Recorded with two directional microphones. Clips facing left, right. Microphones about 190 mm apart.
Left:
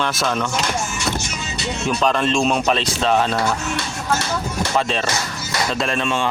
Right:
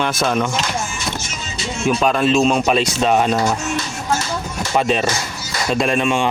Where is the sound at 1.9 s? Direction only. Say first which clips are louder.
Right 3 dB; 10° right (ahead or behind).